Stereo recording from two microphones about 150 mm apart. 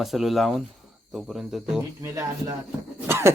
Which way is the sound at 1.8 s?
20° right (ahead or behind).